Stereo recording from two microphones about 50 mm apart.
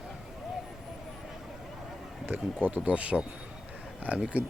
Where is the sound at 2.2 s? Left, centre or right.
Right.